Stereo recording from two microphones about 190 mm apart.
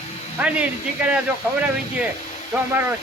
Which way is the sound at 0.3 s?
5° right (ahead or behind).